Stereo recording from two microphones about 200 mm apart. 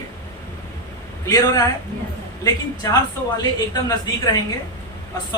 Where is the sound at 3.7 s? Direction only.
20° left (ahead or behind).